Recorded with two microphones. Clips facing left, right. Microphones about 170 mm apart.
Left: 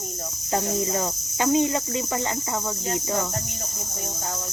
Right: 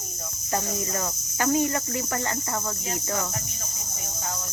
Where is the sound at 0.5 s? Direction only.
20° left (ahead or behind).